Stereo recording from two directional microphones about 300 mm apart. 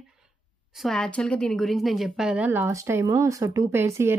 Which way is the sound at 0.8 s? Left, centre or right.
Centre.